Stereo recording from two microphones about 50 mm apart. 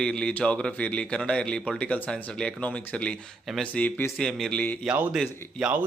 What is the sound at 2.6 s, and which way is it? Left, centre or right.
Speech, left.